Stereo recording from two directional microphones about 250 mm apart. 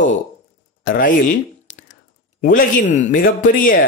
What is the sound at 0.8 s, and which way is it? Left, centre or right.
Speech, left.